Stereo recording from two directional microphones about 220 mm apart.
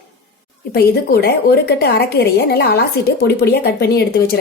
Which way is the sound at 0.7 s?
45° left (ahead or behind).